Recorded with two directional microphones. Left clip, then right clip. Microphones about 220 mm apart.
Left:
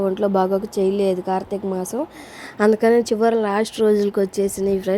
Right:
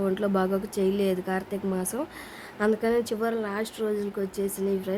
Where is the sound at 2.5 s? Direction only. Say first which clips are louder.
Left 9 dB; 35° left (ahead or behind).